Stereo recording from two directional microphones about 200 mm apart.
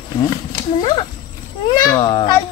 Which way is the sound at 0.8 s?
25° left (ahead or behind).